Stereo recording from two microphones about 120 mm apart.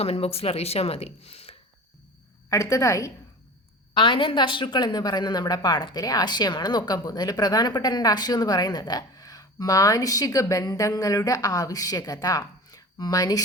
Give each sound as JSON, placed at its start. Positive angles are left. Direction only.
{"t": 0.0, "sound": "speech", "side_deg": 60}
{"t": 2.5, "sound": "a woman's voice", "side_deg": 25}
{"t": 3.9, "sound": "a woman's voice", "side_deg": 45}